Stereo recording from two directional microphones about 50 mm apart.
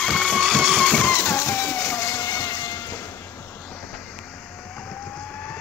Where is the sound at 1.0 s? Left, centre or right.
Left.